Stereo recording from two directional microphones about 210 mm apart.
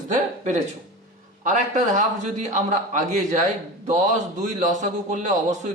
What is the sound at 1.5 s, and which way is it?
A man's voice, 35° right (ahead or behind).